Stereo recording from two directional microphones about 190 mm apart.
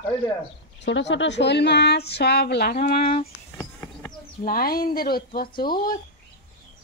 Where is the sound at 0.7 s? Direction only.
70° left (ahead or behind); by 3.3 s 50° left (ahead or behind).